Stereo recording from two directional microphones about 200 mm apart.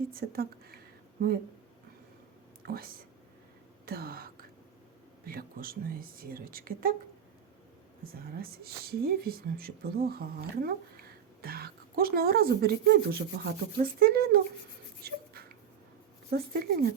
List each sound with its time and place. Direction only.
0.1 s speech: 50° right (ahead or behind)
3.8 s speech: 50° right (ahead or behind)
8.0 s speech: 50° right (ahead or behind)
15.0 s a sound: 50° right (ahead or behind)
16.3 s speech: 50° right (ahead or behind)